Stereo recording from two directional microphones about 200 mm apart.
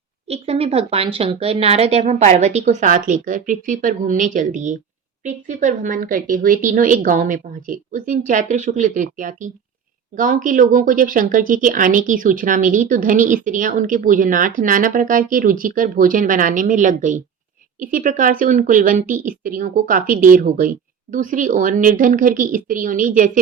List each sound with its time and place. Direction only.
0.3 s speech: 30° right (ahead or behind)